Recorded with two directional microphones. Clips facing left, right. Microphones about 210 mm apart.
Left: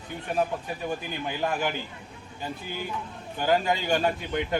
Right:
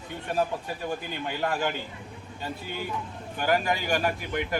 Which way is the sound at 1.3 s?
15° left (ahead or behind).